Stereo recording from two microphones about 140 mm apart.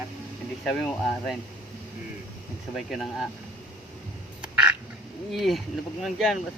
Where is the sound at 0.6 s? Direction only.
5° left (ahead or behind).